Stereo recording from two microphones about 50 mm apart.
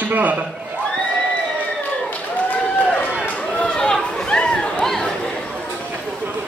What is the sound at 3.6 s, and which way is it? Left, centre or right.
Chatter, centre.